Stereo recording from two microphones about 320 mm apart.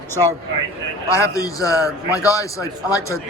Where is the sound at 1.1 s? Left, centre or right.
Centre.